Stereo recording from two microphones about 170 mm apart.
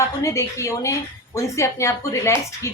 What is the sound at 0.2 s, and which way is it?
Speech, 20° left (ahead or behind).